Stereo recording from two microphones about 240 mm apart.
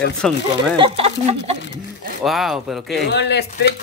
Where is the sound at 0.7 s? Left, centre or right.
Right.